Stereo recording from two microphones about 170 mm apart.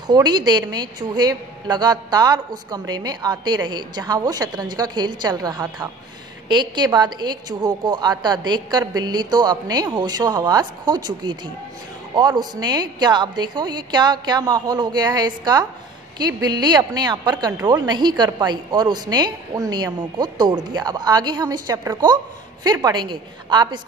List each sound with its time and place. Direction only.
0.0 s a woman's voice: 25° right (ahead or behind)